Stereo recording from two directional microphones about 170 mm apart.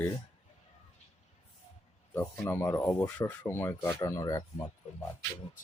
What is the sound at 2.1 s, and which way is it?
Speech, 10° left (ahead or behind).